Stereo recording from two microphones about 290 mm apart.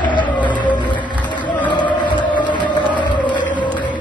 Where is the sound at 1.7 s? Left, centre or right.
Centre.